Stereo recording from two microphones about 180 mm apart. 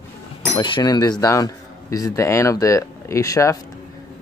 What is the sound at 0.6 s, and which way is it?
Speech, 25° left (ahead or behind).